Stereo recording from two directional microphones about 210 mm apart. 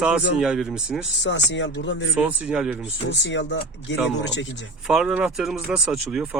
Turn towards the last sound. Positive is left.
turn(degrees=-5)  # may be behind; listen again after turning